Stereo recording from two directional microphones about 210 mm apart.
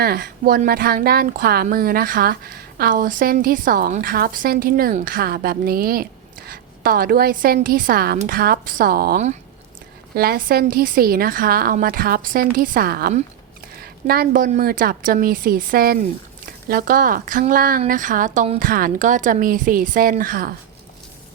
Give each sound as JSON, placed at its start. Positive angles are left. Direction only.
{"t": 0.0, "sound": "speech", "side_deg": -50}